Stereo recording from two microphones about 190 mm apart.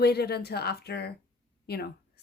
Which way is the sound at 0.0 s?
60° left (ahead or behind).